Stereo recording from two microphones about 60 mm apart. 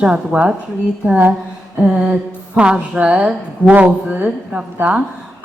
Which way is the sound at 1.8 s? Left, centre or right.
Centre.